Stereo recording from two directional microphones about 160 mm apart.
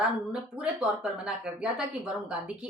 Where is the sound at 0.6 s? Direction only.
5° right (ahead or behind).